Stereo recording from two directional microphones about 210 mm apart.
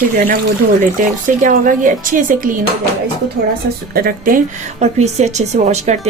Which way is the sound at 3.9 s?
40° right (ahead or behind).